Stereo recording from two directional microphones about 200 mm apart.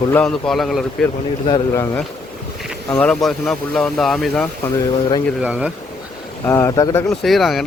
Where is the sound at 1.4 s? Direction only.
20° left (ahead or behind).